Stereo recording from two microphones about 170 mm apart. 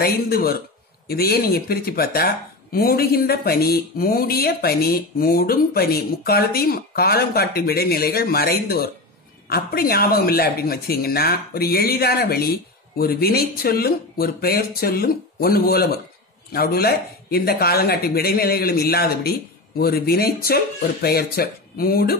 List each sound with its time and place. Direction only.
0.0 s speech: 60° left (ahead or behind)